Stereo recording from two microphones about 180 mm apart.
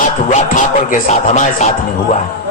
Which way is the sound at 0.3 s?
45° left (ahead or behind).